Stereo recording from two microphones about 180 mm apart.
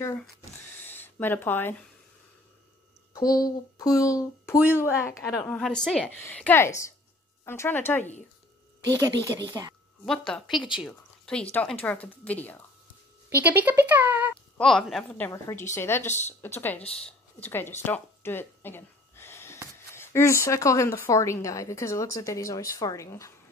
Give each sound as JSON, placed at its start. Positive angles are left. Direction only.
{"t": 0.7, "sound": "a sound", "side_deg": 10}
{"t": 3.2, "sound": "a woman's voice", "side_deg": 20}
{"t": 5.5, "sound": "a woman's voice", "side_deg": 5}
{"t": 9.3, "sound": "a woman's voice", "side_deg": -20}
{"t": 10.0, "sound": "a woman's voice", "side_deg": 5}
{"t": 13.3, "sound": "speech", "side_deg": -10}
{"t": 14.6, "sound": "a woman's voice", "side_deg": 5}
{"t": 16.9, "sound": "a sound", "side_deg": 10}
{"t": 19.9, "sound": "a woman's voice", "side_deg": 15}